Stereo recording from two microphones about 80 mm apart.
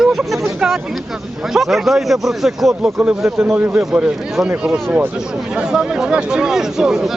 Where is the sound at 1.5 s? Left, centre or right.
Centre.